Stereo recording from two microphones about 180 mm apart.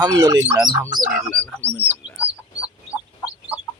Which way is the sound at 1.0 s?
5° right (ahead or behind).